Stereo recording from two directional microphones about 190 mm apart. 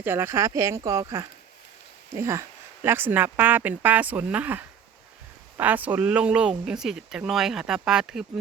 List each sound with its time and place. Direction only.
0.0 s speech: 10° right (ahead or behind)